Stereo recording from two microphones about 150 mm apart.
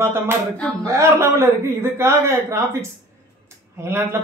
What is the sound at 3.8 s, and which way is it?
Speech, 15° right (ahead or behind).